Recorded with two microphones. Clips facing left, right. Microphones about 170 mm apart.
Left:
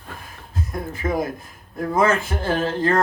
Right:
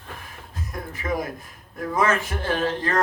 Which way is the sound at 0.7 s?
25° left (ahead or behind).